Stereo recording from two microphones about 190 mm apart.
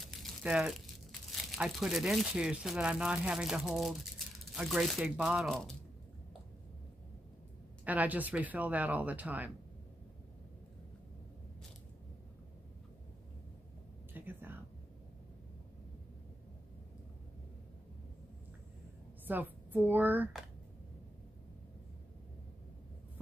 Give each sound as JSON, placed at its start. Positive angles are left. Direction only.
{"t": 0.0, "sound": "crumpling", "side_deg": 0}
{"t": 1.3, "sound": "speech", "side_deg": 0}
{"t": 7.8, "sound": "speech", "side_deg": -10}
{"t": 14.1, "sound": "a sound", "side_deg": -10}
{"t": 19.2, "sound": "speech", "side_deg": -10}